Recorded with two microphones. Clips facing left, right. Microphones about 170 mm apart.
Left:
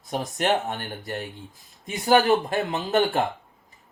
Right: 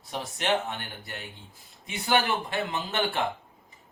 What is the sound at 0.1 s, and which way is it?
Speech, 45° left (ahead or behind).